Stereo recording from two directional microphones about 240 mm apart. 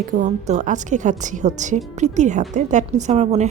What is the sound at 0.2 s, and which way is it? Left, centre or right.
A woman's voice, right.